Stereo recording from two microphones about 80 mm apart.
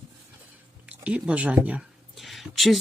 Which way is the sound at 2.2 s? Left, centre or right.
Centre.